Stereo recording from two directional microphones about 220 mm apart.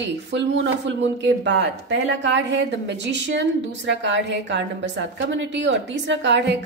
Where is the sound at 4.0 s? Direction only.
55° right (ahead or behind).